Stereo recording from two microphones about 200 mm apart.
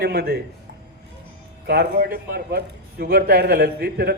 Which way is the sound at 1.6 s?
55° right (ahead or behind).